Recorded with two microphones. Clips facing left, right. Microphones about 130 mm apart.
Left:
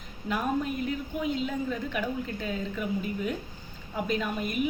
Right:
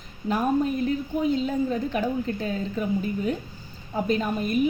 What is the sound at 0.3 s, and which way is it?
A woman's voice, 35° right (ahead or behind).